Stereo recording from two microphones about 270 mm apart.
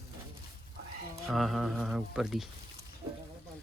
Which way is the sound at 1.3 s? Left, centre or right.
Centre.